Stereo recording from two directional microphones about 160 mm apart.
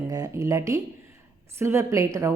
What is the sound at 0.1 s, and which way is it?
A woman's voice, 20° right (ahead or behind).